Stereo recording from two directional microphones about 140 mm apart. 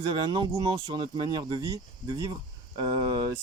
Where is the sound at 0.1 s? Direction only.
30° right (ahead or behind).